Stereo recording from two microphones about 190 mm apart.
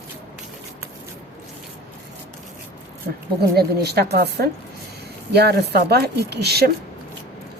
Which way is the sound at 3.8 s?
55° right (ahead or behind).